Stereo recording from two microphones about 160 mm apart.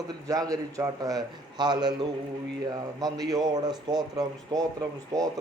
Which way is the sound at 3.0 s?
25° right (ahead or behind).